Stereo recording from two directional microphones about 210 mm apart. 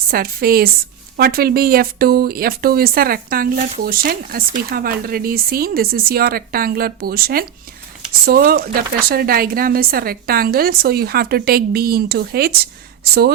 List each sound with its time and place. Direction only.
0.1 s speech: 45° right (ahead or behind)